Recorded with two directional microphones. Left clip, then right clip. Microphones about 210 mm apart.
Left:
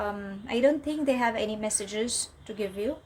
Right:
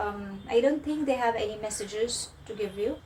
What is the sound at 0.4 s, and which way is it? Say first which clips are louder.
A woman's voice: even; 55° left (ahead or behind).